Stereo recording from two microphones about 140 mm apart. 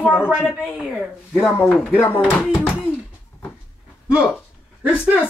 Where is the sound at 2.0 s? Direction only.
15° left (ahead or behind).